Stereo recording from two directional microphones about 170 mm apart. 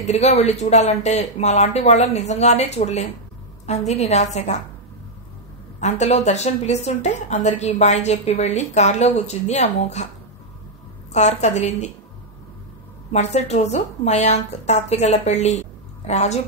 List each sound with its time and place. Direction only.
0.0 s a woman's voice: 40° left (ahead or behind)
5.8 s a woman's voice: 40° left (ahead or behind)
11.1 s a woman's voice: 40° left (ahead or behind)
13.1 s a woman's voice: 40° left (ahead or behind)